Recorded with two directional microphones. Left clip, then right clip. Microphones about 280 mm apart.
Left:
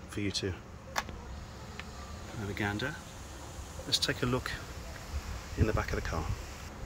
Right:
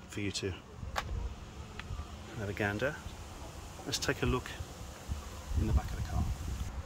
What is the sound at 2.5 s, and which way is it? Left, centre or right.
Speech, centre.